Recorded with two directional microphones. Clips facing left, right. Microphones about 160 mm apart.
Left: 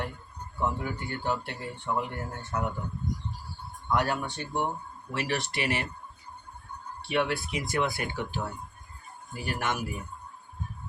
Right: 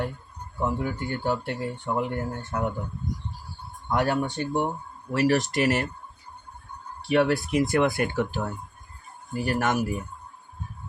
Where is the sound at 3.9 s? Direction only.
50° right (ahead or behind).